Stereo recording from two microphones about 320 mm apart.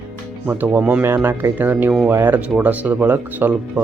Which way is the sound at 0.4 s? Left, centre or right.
Centre.